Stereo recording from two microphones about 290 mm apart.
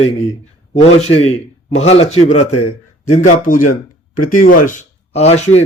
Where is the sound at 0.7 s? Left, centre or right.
Left.